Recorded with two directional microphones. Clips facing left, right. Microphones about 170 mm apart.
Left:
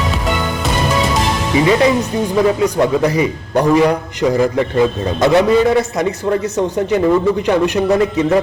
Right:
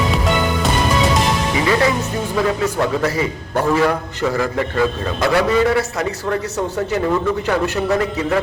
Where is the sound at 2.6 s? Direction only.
15° left (ahead or behind).